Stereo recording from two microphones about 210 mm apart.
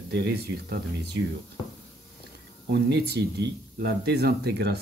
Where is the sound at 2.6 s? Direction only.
55° right (ahead or behind).